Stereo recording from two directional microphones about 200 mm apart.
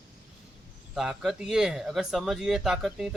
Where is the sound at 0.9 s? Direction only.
5° right (ahead or behind).